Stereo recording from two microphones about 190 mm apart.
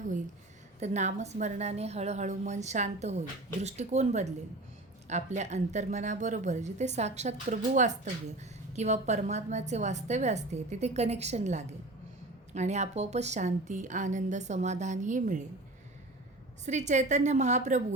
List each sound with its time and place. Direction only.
0.8 s speech: 35° right (ahead or behind)
16.6 s speech: 40° right (ahead or behind)